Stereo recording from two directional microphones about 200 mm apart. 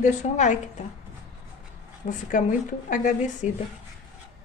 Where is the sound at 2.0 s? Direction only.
40° left (ahead or behind).